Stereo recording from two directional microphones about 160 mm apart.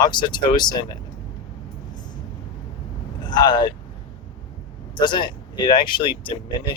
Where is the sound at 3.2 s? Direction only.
25° left (ahead or behind).